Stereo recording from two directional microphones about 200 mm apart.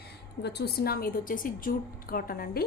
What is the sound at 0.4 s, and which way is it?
A woman's voice, 55° left (ahead or behind).